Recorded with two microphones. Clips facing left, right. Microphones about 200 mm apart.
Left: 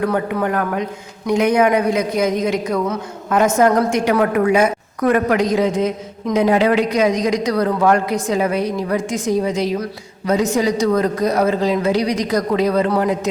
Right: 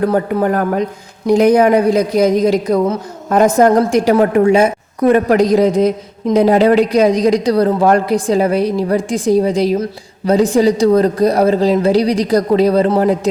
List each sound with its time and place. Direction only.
0.0 s a woman's voice: 35° right (ahead or behind)